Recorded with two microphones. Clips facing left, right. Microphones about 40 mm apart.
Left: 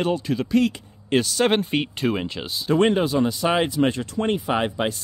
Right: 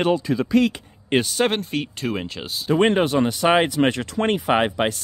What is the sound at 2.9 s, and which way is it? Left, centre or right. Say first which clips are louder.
Speech: right 1 dB; right.